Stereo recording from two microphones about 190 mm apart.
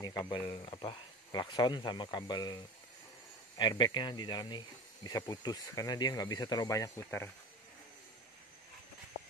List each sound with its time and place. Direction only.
0.0 s speech: 20° left (ahead or behind)